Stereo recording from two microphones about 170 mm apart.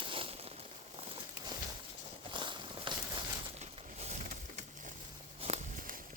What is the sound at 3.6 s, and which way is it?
Pigeon, 40° right (ahead or behind).